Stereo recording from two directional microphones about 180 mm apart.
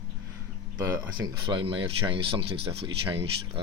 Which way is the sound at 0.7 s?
15° right (ahead or behind).